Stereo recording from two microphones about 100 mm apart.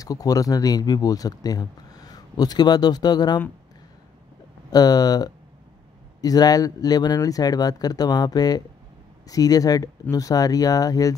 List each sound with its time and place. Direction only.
0.0 s speech: 40° left (ahead or behind)
4.6 s speech: 40° left (ahead or behind)